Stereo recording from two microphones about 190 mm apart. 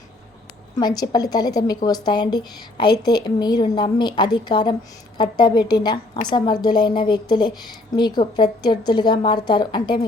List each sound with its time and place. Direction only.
0.8 s a woman's voice: 20° left (ahead or behind)